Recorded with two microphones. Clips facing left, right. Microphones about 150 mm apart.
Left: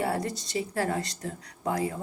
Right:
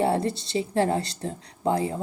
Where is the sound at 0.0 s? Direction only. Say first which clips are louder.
Right 6 dB; 25° right (ahead or behind).